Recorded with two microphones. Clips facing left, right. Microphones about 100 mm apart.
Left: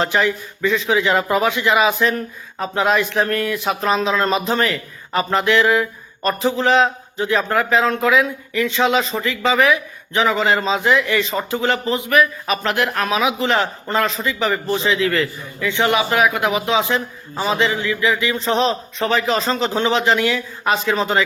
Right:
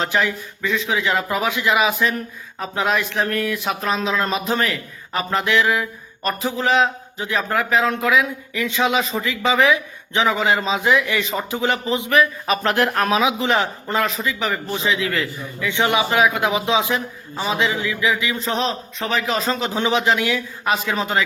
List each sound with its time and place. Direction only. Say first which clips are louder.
0.0 s a man's voice: left 3 dB; centre (ahead or behind); by 13.2 s 35° right (ahead or behind)
13.2 s a man's voice: left 1 dB; 15° right (ahead or behind)
15.7 s a man's voice: left 1 dB; 15° right (ahead or behind)
16.9 s a man's voice: left 2 dB; 5° right (ahead or behind)